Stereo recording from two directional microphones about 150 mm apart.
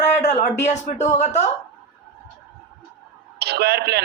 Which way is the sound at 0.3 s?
50° left (ahead or behind).